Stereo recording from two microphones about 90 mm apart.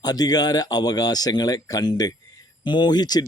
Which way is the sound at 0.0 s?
45° left (ahead or behind).